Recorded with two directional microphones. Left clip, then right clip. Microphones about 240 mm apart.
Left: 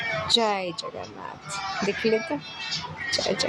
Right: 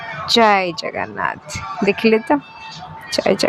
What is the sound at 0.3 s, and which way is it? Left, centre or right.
Speech, right.